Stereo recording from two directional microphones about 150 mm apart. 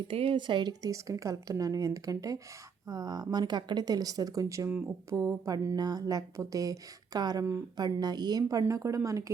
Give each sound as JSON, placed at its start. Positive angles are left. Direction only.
{"t": 0.1, "sound": "speech", "side_deg": -40}